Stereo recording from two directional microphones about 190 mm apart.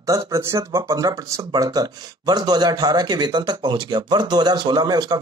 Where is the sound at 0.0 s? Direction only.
15° right (ahead or behind).